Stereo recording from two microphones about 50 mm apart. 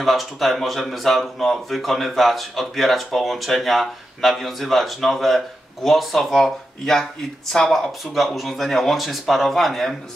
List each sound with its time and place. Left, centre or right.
0.0 s speech: centre